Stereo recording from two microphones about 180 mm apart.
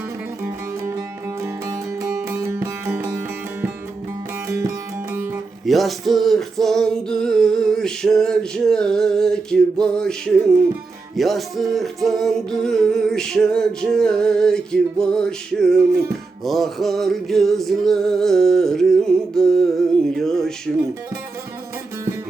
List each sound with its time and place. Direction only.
0.4 s music: 15° right (ahead or behind)
5.6 s music: centre (ahead or behind)